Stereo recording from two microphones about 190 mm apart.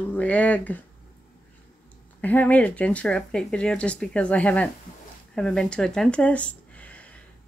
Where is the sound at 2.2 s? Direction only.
10° left (ahead or behind).